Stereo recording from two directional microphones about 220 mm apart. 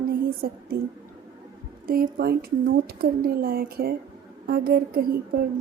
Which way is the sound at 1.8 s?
40° right (ahead or behind).